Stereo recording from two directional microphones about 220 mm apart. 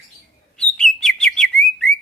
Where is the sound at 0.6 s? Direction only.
5° left (ahead or behind).